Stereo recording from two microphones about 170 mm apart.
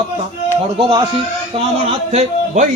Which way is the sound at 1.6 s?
40° right (ahead or behind).